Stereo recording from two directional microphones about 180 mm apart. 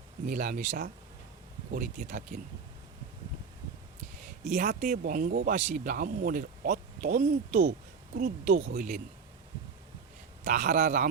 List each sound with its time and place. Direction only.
0.3 s speech: 50° right (ahead or behind)
4.4 s speech: 45° right (ahead or behind)
10.4 s speech: 50° right (ahead or behind)